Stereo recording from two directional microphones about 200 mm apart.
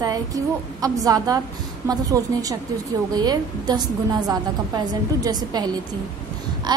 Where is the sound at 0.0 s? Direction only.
20° right (ahead or behind).